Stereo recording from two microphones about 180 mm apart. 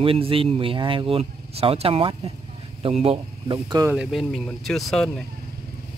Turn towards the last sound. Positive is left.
turn(degrees=0)  # may be behind; listen again after turning